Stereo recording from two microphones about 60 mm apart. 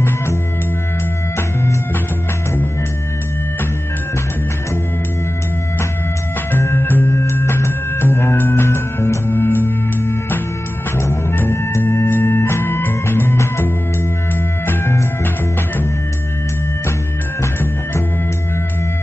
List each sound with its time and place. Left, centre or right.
6.6 s music: left
11.0 s music: left
12.1 s music: left
14.7 s music: left